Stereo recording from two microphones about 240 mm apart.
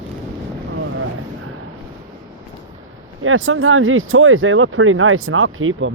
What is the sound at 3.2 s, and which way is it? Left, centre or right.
Speech, right.